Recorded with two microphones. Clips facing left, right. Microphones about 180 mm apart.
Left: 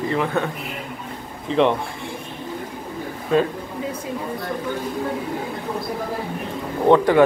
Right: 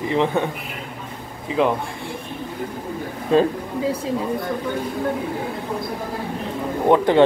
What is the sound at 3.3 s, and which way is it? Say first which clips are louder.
Speech: right 2 dB; 35° right (ahead or behind).